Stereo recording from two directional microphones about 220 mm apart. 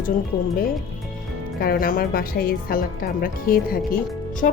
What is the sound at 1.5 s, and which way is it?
A woman's voice, 45° left (ahead or behind).